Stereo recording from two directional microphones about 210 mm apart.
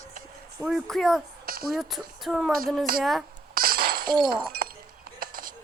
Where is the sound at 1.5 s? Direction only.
45° right (ahead or behind).